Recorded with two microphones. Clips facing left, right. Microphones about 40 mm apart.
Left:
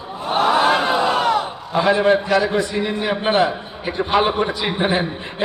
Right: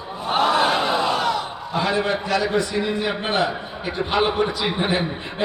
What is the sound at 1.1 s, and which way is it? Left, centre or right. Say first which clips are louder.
Crowd: left 4 dB; left.